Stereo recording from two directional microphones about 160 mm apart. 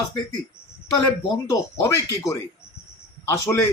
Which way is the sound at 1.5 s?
20° left (ahead or behind).